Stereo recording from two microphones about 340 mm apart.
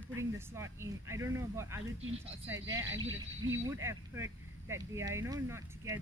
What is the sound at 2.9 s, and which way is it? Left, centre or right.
Speech, right.